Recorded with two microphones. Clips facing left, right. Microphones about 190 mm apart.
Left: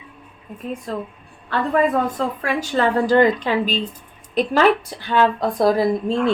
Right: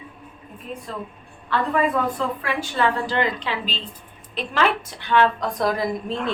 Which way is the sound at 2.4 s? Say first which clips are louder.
Left 4 dB; 45° left (ahead or behind).